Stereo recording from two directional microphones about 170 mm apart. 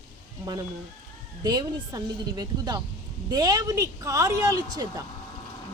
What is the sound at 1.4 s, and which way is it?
A woman's voice, 25° right (ahead or behind).